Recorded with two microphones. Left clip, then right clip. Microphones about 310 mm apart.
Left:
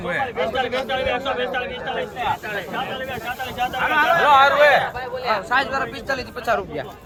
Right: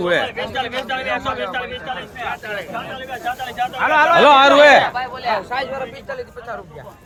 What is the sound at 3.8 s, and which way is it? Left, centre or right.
Speech, centre.